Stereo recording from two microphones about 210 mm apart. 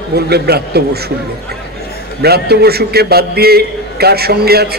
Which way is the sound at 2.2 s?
50° right (ahead or behind).